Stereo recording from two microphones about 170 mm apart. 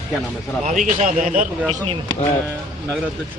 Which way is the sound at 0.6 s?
45° right (ahead or behind).